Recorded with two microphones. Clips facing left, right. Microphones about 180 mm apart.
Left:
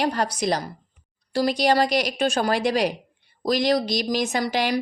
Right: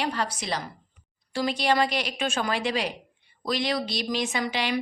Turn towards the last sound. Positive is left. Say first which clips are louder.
# left 4 dB
turn(degrees=40)  # may be behind; listen again after turning